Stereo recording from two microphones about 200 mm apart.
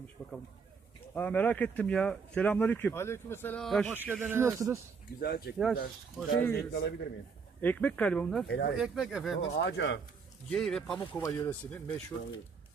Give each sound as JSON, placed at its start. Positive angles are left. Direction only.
{"t": 0.2, "sound": "speech", "side_deg": 5}
{"t": 4.0, "sound": "speech", "side_deg": -10}
{"t": 5.2, "sound": "speech", "side_deg": 50}
{"t": 7.6, "sound": "speech", "side_deg": 10}
{"t": 8.4, "sound": "speech", "side_deg": 55}
{"t": 8.7, "sound": "speech", "side_deg": 0}
{"t": 9.6, "sound": "speech", "side_deg": 60}
{"t": 10.5, "sound": "speech", "side_deg": 5}
{"t": 11.2, "sound": "speech", "side_deg": 15}